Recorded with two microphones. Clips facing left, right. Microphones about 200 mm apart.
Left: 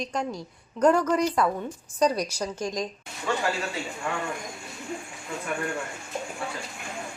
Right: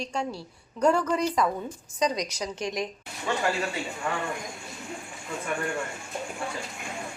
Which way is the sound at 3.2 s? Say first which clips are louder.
Even; centre (ahead or behind).